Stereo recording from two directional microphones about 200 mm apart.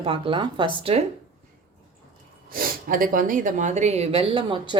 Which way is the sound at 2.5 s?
45° right (ahead or behind).